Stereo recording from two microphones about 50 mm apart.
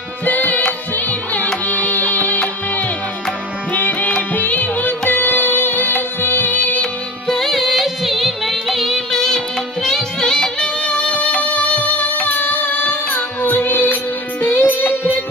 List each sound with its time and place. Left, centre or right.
0.2 s music: left
3.7 s music: left
6.8 s music: centre; by 15.1 s left